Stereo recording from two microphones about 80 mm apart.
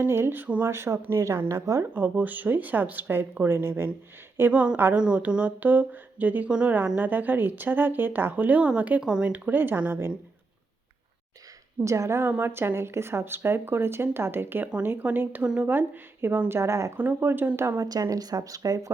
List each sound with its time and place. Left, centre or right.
0.0 s speech: right
0.7 s speech: right
1.9 s a woman's voice: right
4.9 s speech: centre
9.3 s speech: right
11.9 s speech: right
16.6 s speech: right
17.7 s speech: right